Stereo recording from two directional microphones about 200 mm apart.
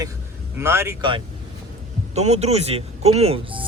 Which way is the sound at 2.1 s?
35° right (ahead or behind).